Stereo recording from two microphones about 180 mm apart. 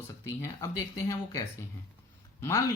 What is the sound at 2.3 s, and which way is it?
Speech, 15° left (ahead or behind).